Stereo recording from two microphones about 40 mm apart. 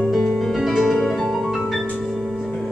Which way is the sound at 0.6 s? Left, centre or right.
Centre.